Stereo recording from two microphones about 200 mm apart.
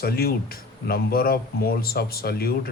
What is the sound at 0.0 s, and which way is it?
Speech, 50° left (ahead or behind).